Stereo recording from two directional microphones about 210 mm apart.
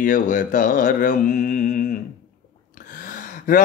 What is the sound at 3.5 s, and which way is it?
Mantra, 40° left (ahead or behind).